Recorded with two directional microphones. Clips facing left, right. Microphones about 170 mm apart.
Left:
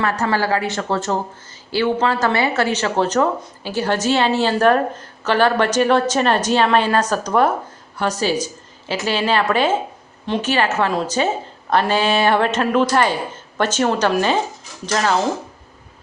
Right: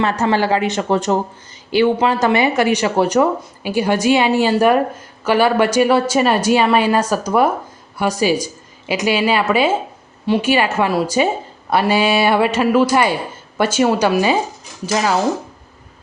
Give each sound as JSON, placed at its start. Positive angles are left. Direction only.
{"t": 0.0, "sound": "speech", "side_deg": -20}